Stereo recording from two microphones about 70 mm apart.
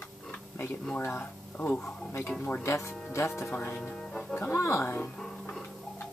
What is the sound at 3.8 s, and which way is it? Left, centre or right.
Music, centre.